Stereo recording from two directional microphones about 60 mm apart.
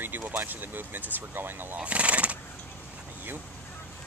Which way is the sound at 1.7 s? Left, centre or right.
Right.